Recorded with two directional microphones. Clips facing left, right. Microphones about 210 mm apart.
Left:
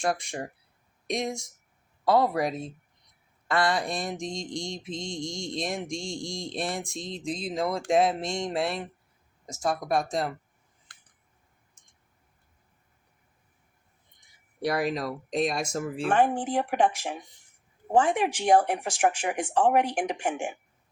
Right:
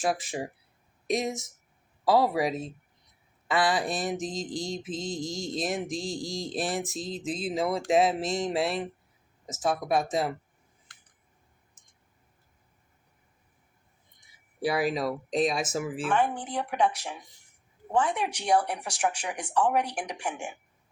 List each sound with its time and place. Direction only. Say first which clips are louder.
0.0 s mantra: even; 5° right (ahead or behind)
11.8 s a sound: even; 5° right (ahead or behind)
14.6 s mantra: right 1 dB; 5° right (ahead or behind)
16.0 s speech: left 5 dB; 40° left (ahead or behind)
17.9 s speech: left 4 dB; 50° left (ahead or behind)